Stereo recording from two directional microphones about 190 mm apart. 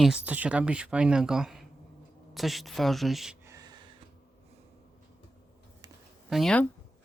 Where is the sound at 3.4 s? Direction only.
20° right (ahead or behind).